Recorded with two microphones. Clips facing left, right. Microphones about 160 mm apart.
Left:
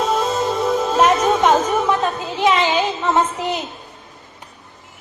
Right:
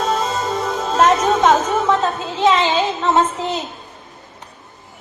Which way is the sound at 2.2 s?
15° left (ahead or behind).